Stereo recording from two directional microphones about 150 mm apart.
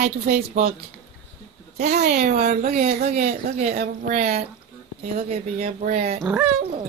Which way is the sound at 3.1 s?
90° right.